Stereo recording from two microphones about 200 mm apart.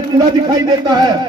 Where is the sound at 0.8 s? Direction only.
20° right (ahead or behind).